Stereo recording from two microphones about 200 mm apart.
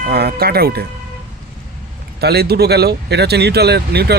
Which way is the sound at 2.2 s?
50° right (ahead or behind).